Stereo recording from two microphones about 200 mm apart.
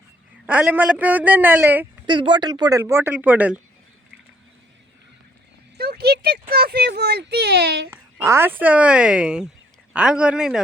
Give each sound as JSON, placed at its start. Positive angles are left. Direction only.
{"t": 0.4, "sound": "speech", "side_deg": -5}
{"t": 2.0, "sound": "speech", "side_deg": -25}
{"t": 5.7, "sound": "speech", "side_deg": -50}
{"t": 7.9, "sound": "a man's voice", "side_deg": -10}